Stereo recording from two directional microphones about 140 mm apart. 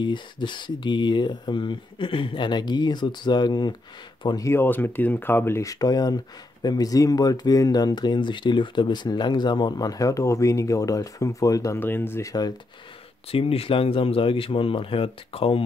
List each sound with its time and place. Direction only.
0.0 s speech: 35° left (ahead or behind)
4.5 s speech: 15° left (ahead or behind)
13.3 s speech: 45° left (ahead or behind)